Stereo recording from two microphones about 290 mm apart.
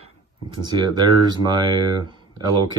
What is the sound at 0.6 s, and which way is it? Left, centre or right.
Speech, centre.